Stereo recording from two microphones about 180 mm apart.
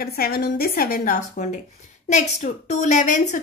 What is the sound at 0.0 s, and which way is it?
A woman's voice, 55° left (ahead or behind).